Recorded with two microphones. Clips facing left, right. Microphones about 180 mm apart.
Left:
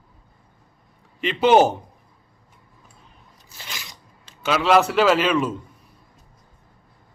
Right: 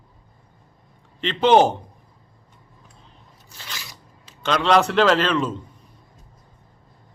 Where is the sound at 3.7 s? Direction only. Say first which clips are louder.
Even; 15° left (ahead or behind).